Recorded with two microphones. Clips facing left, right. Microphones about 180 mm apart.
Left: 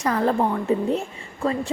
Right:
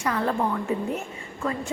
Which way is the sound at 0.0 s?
40° left (ahead or behind).